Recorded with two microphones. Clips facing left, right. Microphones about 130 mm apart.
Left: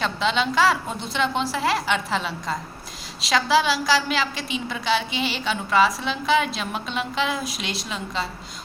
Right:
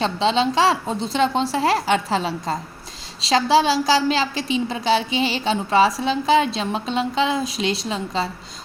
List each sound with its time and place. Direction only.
0.0 s a woman's voice: 30° right (ahead or behind)